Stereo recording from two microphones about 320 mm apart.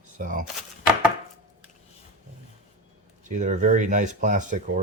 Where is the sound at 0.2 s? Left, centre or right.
Right.